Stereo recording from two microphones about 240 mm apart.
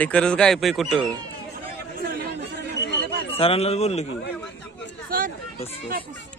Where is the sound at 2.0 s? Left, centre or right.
Right.